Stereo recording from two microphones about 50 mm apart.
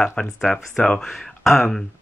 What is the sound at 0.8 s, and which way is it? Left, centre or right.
Speech, left.